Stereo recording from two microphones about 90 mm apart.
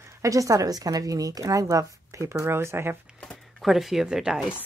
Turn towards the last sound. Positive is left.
turn(degrees=-5)  # may be behind; listen again after turning